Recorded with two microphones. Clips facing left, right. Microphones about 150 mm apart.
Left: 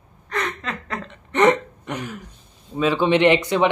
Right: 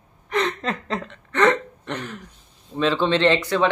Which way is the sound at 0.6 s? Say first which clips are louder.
Right 4 dB; 35° right (ahead or behind).